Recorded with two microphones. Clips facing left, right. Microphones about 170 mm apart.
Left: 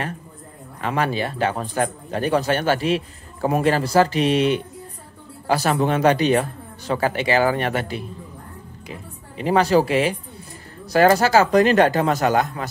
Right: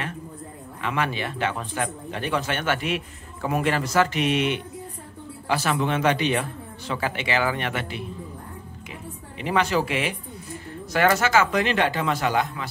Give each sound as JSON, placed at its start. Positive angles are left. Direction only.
{"t": 0.7, "sound": "speech", "side_deg": 40}
{"t": 9.4, "sound": "speech", "side_deg": 35}